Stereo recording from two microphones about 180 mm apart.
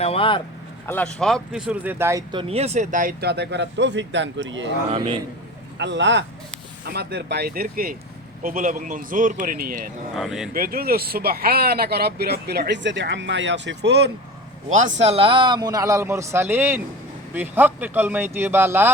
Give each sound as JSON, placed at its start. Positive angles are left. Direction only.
{"t": 0.0, "sound": "speech", "side_deg": 30}
{"t": 0.9, "sound": "speech", "side_deg": 5}
{"t": 4.9, "sound": "speech", "side_deg": -30}
{"t": 5.7, "sound": "speech", "side_deg": -80}
{"t": 6.8, "sound": "a man's voice", "side_deg": -65}
{"t": 10.2, "sound": "speech", "side_deg": 0}
{"t": 10.5, "sound": "speech", "side_deg": -55}
{"t": 15.0, "sound": "a man's voice", "side_deg": -35}